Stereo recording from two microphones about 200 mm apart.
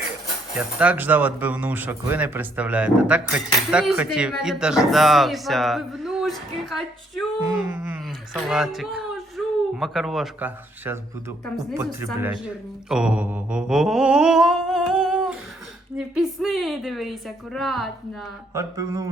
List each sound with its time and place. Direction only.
0.8 s speech: 10° right (ahead or behind)
12.9 s mantra: 5° right (ahead or behind)
16.0 s speech: centre (ahead or behind)
18.5 s speech: 15° right (ahead or behind)